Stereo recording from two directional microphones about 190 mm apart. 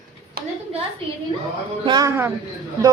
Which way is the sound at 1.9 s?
20° right (ahead or behind).